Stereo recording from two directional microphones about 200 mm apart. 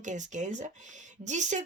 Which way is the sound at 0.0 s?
35° right (ahead or behind).